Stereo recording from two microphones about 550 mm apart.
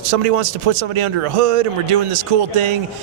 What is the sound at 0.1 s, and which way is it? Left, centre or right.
Speech, right.